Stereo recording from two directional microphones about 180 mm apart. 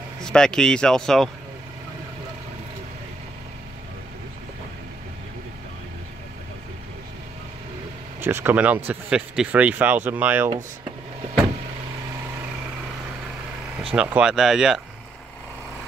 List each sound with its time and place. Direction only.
0.2 s speech: 5° left (ahead or behind)
8.2 s speech: 10° right (ahead or behind)
13.9 s speech: 5° right (ahead or behind)